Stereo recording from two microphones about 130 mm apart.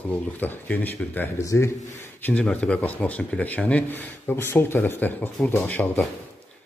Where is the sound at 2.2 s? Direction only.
10° left (ahead or behind).